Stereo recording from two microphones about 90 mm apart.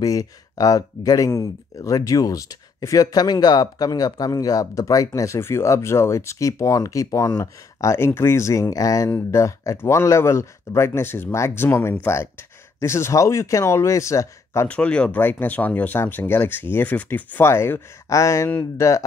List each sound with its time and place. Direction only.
0.0 s speech: 40° left (ahead or behind)
14.7 s speech: 15° left (ahead or behind); by 19.0 s 35° left (ahead or behind)